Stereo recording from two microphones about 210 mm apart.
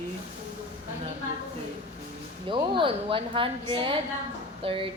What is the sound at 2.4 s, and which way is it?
A woman's voice, 25° right (ahead or behind).